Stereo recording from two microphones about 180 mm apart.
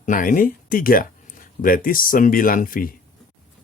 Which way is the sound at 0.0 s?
50° left (ahead or behind).